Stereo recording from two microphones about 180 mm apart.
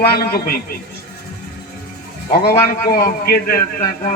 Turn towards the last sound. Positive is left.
turn(degrees=50)  # may be behind; listen again after turning